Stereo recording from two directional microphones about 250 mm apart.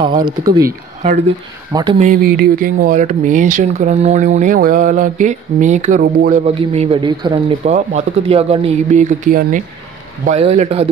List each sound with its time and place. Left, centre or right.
0.0 s speech: centre
1.7 s speech: centre
2.0 s speech: right